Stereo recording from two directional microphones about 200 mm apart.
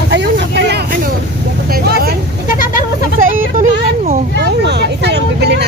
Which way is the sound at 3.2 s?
40° right (ahead or behind).